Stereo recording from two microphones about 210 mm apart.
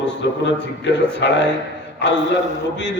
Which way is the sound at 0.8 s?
55° left (ahead or behind).